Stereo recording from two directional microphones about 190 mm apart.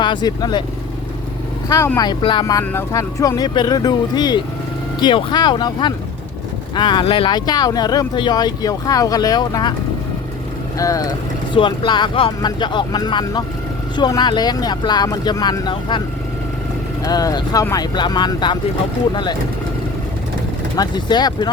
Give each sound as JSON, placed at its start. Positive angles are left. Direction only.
{"t": 0.0, "sound": "speech", "side_deg": 25}
{"t": 1.7, "sound": "speech", "side_deg": 15}
{"t": 10.8, "sound": "speech", "side_deg": 15}
{"t": 17.0, "sound": "speech", "side_deg": 20}
{"t": 20.7, "sound": "speech", "side_deg": 20}